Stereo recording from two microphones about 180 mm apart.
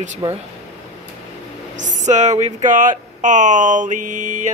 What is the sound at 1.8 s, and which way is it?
Speech, 45° right (ahead or behind).